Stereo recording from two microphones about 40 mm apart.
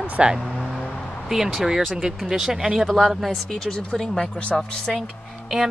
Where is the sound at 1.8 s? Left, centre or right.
Centre.